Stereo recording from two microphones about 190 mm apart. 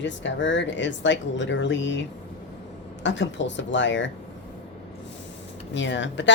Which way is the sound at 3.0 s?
70° left (ahead or behind).